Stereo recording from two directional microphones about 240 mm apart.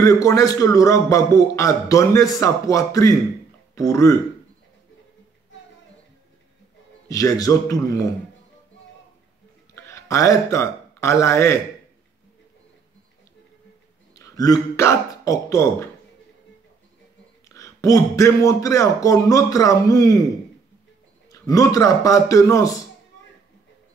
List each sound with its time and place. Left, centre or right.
0.0 s a man's voice: centre
7.1 s a man's voice: centre
9.8 s speech: centre
14.1 s speech: centre
17.5 s a man's voice: centre
21.3 s a man's voice: centre